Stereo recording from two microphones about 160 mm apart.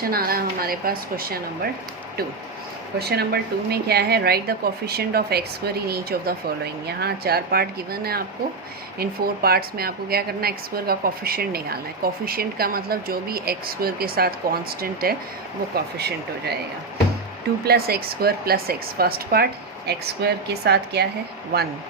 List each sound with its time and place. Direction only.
0.0 s a woman's voice: 70° right (ahead or behind)
3.0 s a woman's voice: 85° right
15.7 s speech: 90° right
17.7 s a woman's voice: 75° right (ahead or behind)
19.9 s speech: 90° right